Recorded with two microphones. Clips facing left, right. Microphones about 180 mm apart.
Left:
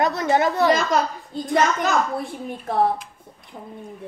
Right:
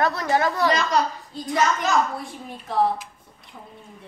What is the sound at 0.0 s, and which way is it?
Speech, 20° left (ahead or behind).